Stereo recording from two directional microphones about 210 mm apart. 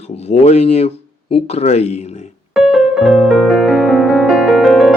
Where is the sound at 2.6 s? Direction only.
Centre (ahead or behind).